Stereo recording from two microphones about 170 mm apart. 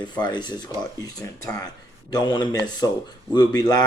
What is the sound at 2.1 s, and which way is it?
A man's voice, 25° left (ahead or behind).